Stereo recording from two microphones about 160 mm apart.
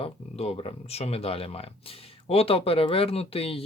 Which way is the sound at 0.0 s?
40° left (ahead or behind).